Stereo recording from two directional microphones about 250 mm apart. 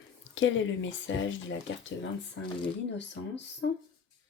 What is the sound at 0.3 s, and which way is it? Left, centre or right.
Speech, left.